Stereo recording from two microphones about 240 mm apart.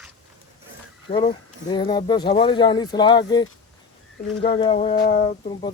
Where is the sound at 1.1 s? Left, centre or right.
Left.